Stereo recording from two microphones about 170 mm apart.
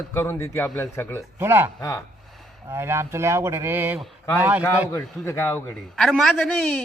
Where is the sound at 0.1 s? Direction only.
15° left (ahead or behind).